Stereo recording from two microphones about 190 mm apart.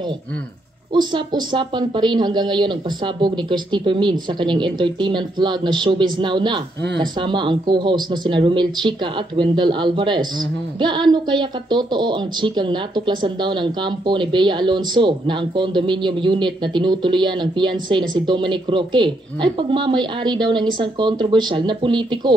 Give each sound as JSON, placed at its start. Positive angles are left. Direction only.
{"t": 0.9, "sound": "speech", "side_deg": -25}